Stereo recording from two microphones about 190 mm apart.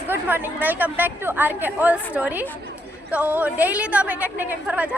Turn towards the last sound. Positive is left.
turn(degrees=-5)  # may be behind; listen again after turning